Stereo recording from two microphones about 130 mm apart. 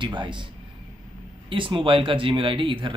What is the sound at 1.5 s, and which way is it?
A man's voice, 40° right (ahead or behind).